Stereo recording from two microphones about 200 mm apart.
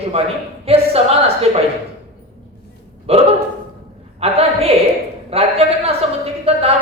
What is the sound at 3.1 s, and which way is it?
A woman's voice, 30° right (ahead or behind).